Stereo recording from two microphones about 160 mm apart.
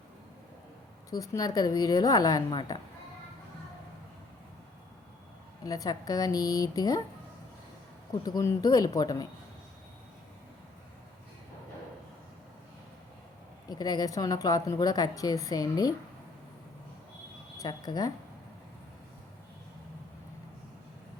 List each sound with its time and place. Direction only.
1.1 s a woman's voice: 20° left (ahead or behind)
5.6 s a woman's voice: 25° left (ahead or behind)
8.2 s a woman's voice: 20° left (ahead or behind)
13.7 s a woman's voice: 25° left (ahead or behind)
17.6 s a woman's voice: 25° left (ahead or behind)